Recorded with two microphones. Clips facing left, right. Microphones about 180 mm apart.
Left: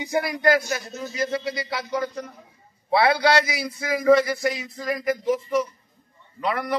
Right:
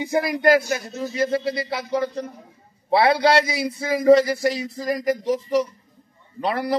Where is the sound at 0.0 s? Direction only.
30° right (ahead or behind).